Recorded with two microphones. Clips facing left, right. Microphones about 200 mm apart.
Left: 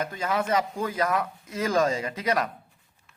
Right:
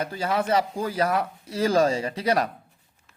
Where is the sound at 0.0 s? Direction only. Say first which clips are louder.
Right 2 dB; 30° right (ahead or behind).